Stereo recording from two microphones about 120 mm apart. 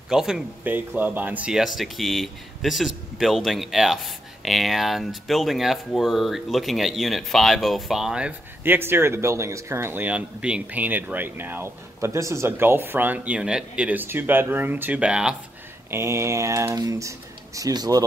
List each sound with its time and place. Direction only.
0.1 s speech: 5° right (ahead or behind)
15.9 s speech: 20° right (ahead or behind)